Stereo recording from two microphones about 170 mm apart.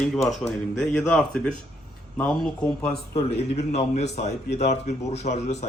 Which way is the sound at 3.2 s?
35° left (ahead or behind).